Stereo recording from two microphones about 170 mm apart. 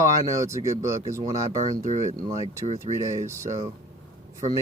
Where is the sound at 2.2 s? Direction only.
20° right (ahead or behind).